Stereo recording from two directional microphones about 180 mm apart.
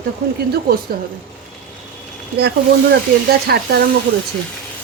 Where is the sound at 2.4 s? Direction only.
65° right (ahead or behind).